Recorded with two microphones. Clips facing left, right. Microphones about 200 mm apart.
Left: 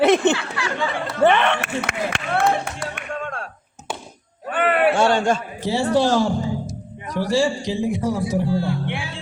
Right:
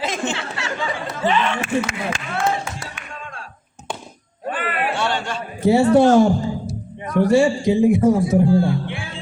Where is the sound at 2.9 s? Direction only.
60° left (ahead or behind).